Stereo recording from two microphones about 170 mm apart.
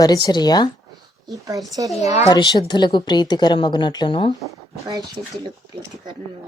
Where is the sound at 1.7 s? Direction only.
20° right (ahead or behind).